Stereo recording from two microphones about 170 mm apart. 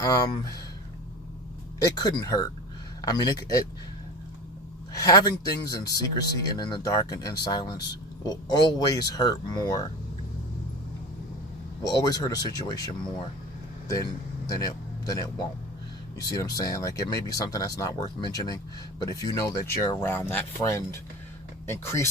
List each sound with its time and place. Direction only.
0.0 s speech: 20° left (ahead or behind)
1.8 s speech: 20° left (ahead or behind)
4.9 s speech: 20° left (ahead or behind)
11.8 s speech: 20° left (ahead or behind)